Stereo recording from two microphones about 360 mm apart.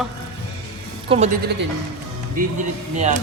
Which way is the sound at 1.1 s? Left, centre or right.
Centre.